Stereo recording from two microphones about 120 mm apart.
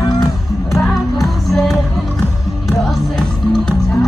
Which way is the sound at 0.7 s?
Centre (ahead or behind).